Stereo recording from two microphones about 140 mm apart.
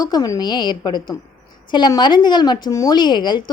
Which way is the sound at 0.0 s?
25° left (ahead or behind).